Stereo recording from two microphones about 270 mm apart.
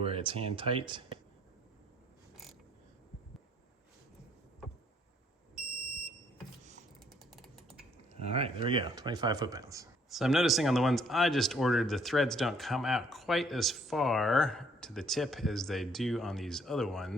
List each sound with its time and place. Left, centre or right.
0.0 s speech: centre
7.3 s a sound: centre
8.1 s speech: right
10.1 s speech: centre